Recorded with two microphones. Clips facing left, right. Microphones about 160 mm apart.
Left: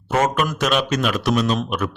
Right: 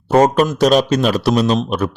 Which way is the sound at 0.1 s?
35° right (ahead or behind).